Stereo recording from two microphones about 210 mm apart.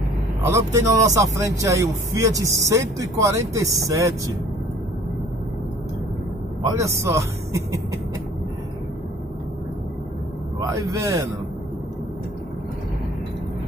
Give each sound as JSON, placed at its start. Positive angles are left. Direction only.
{"t": 0.5, "sound": "a man's voice", "side_deg": -15}
{"t": 6.7, "sound": "a man's voice", "side_deg": -15}
{"t": 10.9, "sound": "a man's voice", "side_deg": -15}